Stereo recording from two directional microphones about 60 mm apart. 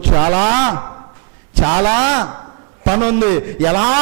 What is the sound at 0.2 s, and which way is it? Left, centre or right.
A man's voice, right.